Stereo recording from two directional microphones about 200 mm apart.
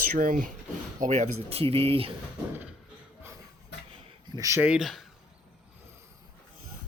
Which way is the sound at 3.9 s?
15° right (ahead or behind).